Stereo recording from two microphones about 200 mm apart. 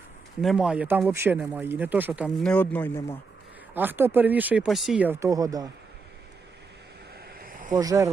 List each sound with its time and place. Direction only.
0.4 s speech: 5° right (ahead or behind)
2.5 s speech: 10° left (ahead or behind)
3.8 s speech: 10° right (ahead or behind)
7.3 s a sound: 45° right (ahead or behind)
7.8 s speech: 15° right (ahead or behind)